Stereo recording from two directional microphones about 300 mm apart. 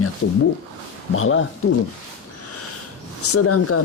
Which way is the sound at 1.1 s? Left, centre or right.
Left.